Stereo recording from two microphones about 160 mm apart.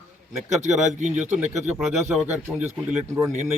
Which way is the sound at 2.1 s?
5° right (ahead or behind).